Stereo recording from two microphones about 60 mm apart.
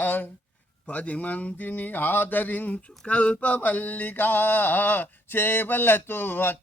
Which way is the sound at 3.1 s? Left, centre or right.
Left.